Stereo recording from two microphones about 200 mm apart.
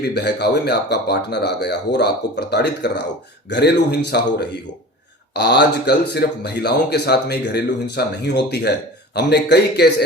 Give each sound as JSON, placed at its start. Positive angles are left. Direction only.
{"t": 0.0, "sound": "speech", "side_deg": 55}